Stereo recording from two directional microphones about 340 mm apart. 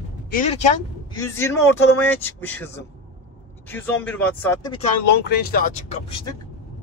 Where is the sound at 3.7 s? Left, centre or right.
Centre.